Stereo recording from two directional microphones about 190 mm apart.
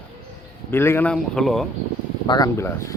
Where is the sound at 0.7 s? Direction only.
10° left (ahead or behind).